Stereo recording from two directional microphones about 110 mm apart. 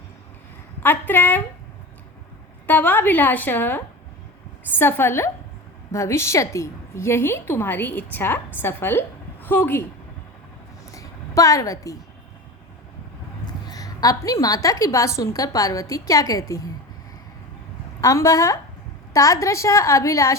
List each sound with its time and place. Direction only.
0.8 s a woman's voice: 20° left (ahead or behind)
2.6 s a woman's voice: 15° left (ahead or behind)
10.9 s a sound: 30° left (ahead or behind)
13.4 s a sound: 35° left (ahead or behind)
14.4 s a woman's voice: 30° left (ahead or behind)
18.0 s a woman's voice: 30° left (ahead or behind)